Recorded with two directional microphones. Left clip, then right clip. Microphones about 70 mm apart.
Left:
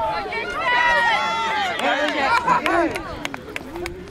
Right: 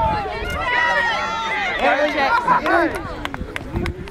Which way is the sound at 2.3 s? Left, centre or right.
Left.